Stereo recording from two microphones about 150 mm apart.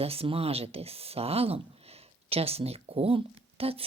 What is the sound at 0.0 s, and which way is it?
Speech, 40° right (ahead or behind).